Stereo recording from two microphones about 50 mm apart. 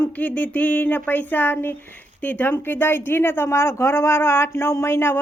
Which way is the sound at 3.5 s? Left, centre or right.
Left.